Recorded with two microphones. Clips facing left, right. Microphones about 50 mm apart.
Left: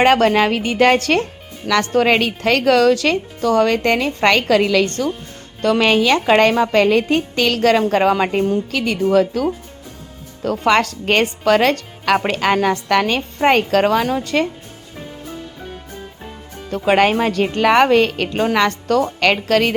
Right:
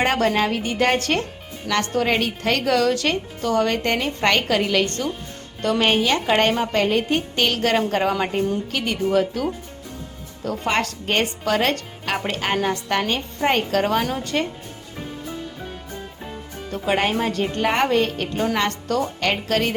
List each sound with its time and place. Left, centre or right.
0.0 s a woman's voice: left
9.1 s a woman's voice: left
10.7 s speech: left
16.7 s speech: left